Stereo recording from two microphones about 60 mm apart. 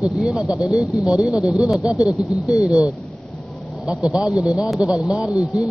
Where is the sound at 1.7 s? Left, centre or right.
Centre.